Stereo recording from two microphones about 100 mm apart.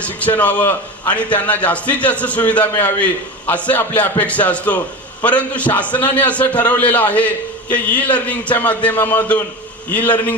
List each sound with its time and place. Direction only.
0.0 s a man's voice: 15° left (ahead or behind)